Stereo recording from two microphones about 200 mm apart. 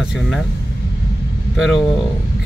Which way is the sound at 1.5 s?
Centre (ahead or behind).